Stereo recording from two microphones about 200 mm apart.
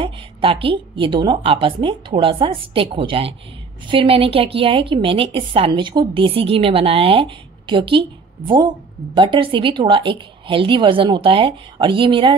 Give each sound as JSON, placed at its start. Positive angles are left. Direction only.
{"t": 0.0, "sound": "a woman's voice", "side_deg": -25}